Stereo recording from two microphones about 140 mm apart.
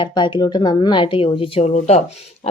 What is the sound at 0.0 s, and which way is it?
Speech, 30° left (ahead or behind).